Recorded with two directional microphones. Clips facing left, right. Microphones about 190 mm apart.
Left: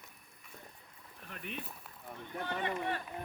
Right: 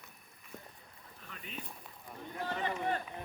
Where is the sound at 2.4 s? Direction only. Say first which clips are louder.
Right 1 dB; 35° right (ahead or behind).